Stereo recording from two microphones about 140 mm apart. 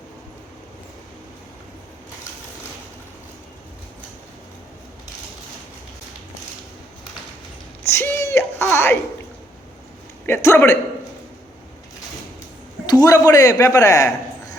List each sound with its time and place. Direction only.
7.9 s a sound: 15° left (ahead or behind)
8.7 s a man's voice: 15° left (ahead or behind)
10.2 s a man's voice: 15° left (ahead or behind)
12.8 s a man's voice: 25° left (ahead or behind)